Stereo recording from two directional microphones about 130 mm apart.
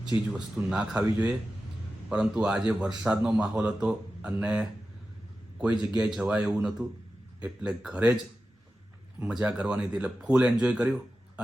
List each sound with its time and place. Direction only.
0.3 s speech: 5° right (ahead or behind)
5.9 s speech: 5° right (ahead or behind)
9.2 s speech: 5° right (ahead or behind)